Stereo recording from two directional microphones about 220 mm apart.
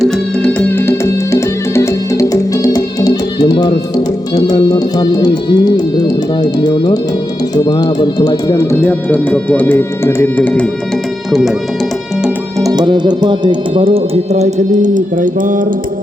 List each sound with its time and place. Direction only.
0.0 s music: 5° left (ahead or behind)
7.5 s speech: 20° left (ahead or behind)
11.3 s music: centre (ahead or behind)
12.2 s speech: 15° right (ahead or behind); by 15.6 s 35° right (ahead or behind)